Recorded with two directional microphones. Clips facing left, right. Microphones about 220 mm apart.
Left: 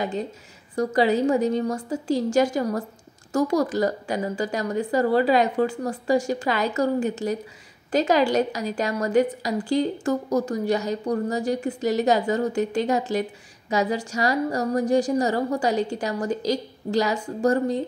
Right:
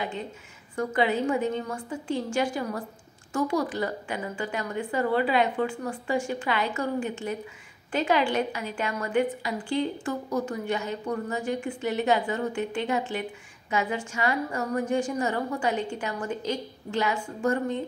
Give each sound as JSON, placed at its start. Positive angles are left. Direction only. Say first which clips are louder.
{"t": 0.7, "sound": "a woman's voice", "louder": "left 5 dB", "side_deg": 40}